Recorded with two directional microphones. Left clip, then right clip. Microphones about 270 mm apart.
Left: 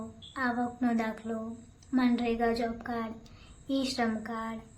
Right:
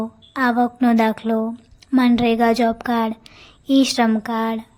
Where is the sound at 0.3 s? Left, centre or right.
Right.